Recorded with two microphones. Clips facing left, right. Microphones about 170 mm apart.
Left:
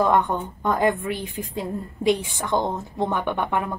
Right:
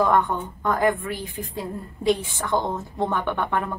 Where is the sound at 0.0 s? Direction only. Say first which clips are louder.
Even; 20° left (ahead or behind).